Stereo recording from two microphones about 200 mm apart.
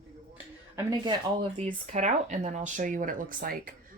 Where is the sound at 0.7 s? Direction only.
20° right (ahead or behind).